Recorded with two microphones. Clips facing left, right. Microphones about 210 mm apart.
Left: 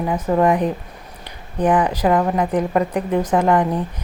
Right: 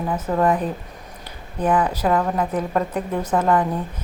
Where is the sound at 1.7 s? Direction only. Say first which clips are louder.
Left 3 dB; 10° left (ahead or behind).